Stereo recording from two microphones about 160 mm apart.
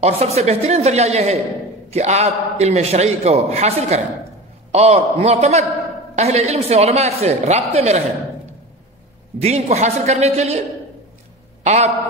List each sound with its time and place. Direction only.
0.0 s a woman's voice: 45° right (ahead or behind)
9.4 s a man's voice: 45° right (ahead or behind)
11.6 s a man's voice: 45° right (ahead or behind)